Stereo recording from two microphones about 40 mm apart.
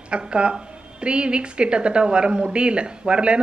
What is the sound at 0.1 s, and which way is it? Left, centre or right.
A woman's voice, right.